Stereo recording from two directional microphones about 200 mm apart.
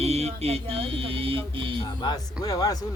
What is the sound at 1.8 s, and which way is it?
Speech, 20° left (ahead or behind).